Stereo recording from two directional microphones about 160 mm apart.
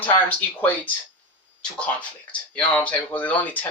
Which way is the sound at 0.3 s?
10° left (ahead or behind).